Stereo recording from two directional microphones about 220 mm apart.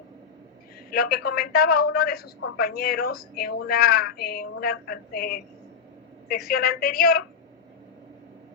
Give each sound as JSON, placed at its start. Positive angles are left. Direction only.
{"t": 0.9, "sound": "a woman's voice", "side_deg": 45}